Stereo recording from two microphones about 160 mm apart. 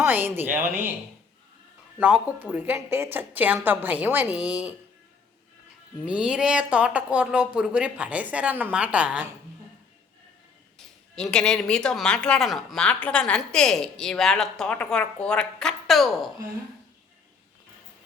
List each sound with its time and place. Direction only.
0.0 s speech: 15° right (ahead or behind)
2.0 s speech: 10° right (ahead or behind)
6.1 s speech: 5° right (ahead or behind)
11.1 s speech: 5° left (ahead or behind)